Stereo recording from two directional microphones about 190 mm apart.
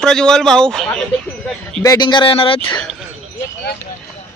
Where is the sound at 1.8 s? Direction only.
20° left (ahead or behind).